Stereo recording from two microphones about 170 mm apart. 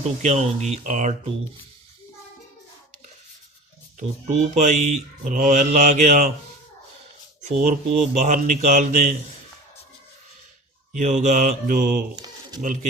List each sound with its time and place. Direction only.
0.2 s speech: 40° right (ahead or behind)
4.4 s speech: 45° right (ahead or behind)
7.4 s speech: 45° right (ahead or behind)
10.9 s speech: 45° right (ahead or behind)
12.1 s a sound: 25° right (ahead or behind)
12.6 s speech: 45° right (ahead or behind)